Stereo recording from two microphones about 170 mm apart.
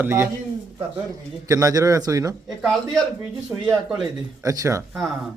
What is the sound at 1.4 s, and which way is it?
Speech, 20° right (ahead or behind).